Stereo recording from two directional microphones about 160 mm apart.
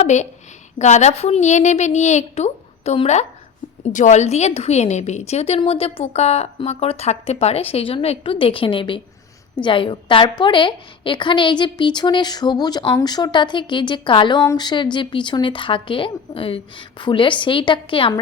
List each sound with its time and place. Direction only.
0.0 s a woman's voice: 45° left (ahead or behind)